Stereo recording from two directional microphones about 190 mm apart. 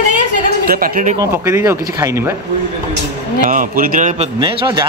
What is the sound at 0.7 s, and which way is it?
Speech, 50° right (ahead or behind).